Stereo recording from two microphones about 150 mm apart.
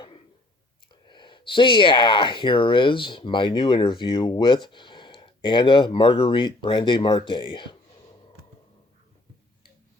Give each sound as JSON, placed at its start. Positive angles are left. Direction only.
{"t": 1.0, "sound": "speech", "side_deg": 30}